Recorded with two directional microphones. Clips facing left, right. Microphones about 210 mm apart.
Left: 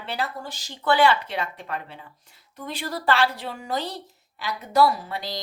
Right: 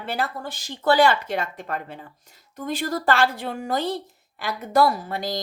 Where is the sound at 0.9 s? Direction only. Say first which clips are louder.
Right 2 dB; 45° right (ahead or behind).